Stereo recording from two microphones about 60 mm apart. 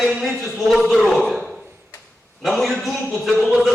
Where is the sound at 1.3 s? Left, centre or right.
Centre.